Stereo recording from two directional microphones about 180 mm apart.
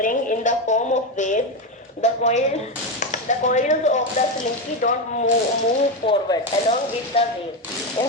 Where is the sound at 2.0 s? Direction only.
40° left (ahead or behind).